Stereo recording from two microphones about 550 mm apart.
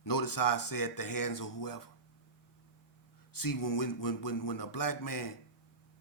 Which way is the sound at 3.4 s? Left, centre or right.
Left.